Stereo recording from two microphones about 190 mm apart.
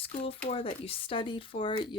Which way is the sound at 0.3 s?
30° left (ahead or behind).